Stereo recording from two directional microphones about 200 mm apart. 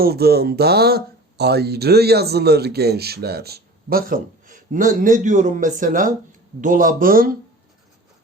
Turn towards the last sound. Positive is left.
turn(degrees=-45)  # may be behind; listen again after turning